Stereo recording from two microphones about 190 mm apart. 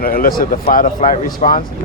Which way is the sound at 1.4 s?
35° left (ahead or behind).